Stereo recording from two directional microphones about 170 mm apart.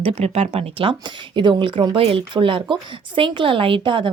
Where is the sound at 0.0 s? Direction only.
35° right (ahead or behind).